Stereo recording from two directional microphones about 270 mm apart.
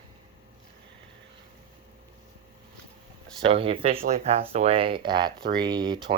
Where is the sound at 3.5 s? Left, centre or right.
Right.